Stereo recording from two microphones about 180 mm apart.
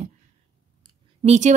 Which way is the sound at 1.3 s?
40° right (ahead or behind).